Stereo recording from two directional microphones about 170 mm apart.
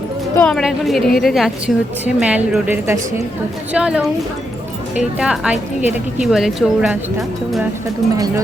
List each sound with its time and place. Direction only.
0.3 s a woman's voice: 5° left (ahead or behind)
5.2 s speech: 5° right (ahead or behind)